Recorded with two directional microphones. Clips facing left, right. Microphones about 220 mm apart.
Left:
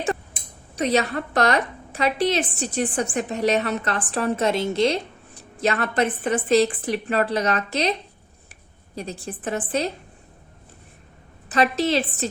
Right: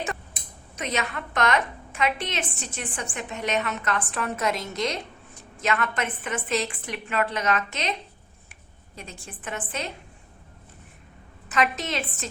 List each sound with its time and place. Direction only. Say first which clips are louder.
0.8 s a woman's voice: left 8 dB; 35° left (ahead or behind)
9.0 s a woman's voice: left 10 dB; 35° left (ahead or behind)
11.4 s a woman's voice: left 6 dB; 35° left (ahead or behind)